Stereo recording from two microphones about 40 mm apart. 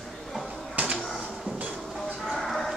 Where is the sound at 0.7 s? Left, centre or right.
Right.